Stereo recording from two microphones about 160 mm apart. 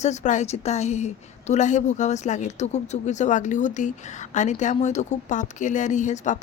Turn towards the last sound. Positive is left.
turn(degrees=50)  # may be behind; listen again after turning